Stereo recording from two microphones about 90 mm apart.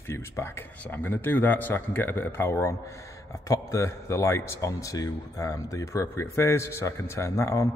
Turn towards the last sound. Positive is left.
turn(degrees=35)  # may be behind; listen again after turning